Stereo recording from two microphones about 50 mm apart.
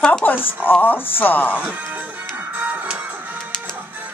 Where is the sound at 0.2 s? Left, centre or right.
Left.